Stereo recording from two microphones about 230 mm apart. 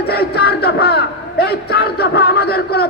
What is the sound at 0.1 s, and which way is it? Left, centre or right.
A man's voice, left.